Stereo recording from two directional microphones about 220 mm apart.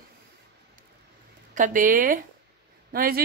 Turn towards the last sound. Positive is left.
turn(degrees=-40)  # may be behind; listen again after turning